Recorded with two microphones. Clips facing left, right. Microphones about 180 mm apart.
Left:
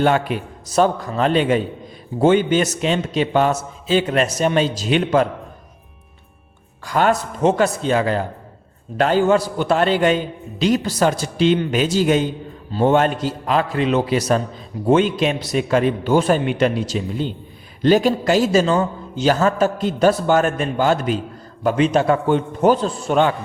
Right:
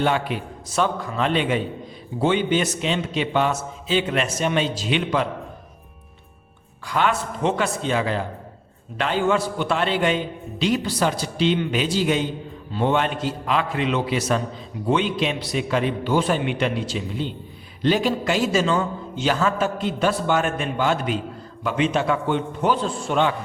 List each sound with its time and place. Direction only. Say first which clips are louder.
0.0 s a man's voice: left 5 dB; 45° left (ahead or behind)
6.8 s a man's voice: left 4 dB; 45° left (ahead or behind)